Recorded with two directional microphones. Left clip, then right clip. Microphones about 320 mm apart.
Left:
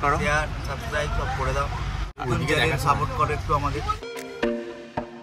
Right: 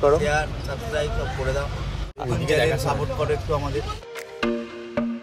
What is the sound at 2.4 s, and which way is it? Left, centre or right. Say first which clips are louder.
A man's voice: right 2 dB; centre.